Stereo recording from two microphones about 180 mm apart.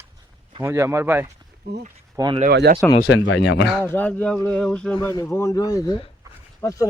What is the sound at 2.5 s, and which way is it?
Speech, 60° right (ahead or behind).